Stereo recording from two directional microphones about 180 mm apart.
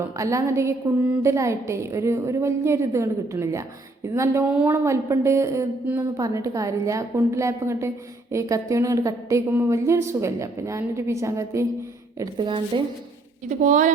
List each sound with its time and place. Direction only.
0.2 s a woman's voice: 15° right (ahead or behind)
13.5 s speech: 45° right (ahead or behind)